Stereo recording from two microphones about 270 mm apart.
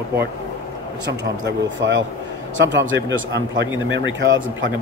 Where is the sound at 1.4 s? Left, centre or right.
Right.